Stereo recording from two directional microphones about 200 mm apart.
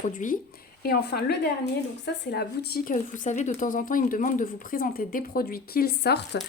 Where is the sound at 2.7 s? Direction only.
40° left (ahead or behind).